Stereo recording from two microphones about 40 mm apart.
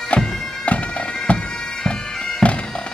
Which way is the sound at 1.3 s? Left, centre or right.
Left.